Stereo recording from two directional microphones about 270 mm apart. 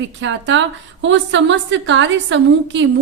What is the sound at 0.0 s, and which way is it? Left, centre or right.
A woman's voice, right.